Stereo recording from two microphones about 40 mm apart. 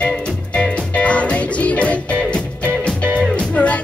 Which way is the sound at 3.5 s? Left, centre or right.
Left.